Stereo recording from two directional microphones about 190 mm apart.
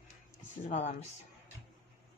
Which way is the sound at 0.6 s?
40° left (ahead or behind).